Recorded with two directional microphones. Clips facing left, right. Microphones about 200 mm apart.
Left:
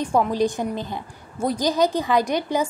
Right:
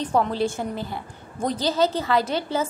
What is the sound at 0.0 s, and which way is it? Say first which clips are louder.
A woman's voice: left 2 dB; 10° left (ahead or behind).